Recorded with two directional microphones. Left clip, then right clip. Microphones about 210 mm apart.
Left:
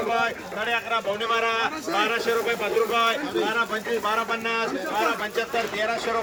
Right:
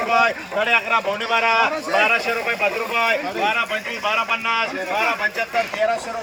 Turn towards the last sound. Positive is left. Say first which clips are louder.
# right 5 dB
turn(degrees=-10)  # may be behind; listen again after turning